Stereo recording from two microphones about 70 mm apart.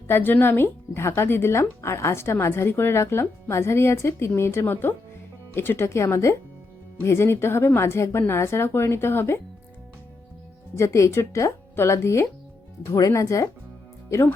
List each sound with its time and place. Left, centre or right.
0.1 s speech: left
10.8 s speech: left